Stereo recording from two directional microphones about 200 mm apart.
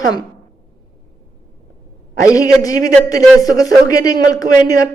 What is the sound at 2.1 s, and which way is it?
Speech, 15° left (ahead or behind).